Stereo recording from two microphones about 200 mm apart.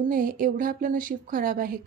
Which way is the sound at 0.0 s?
45° right (ahead or behind).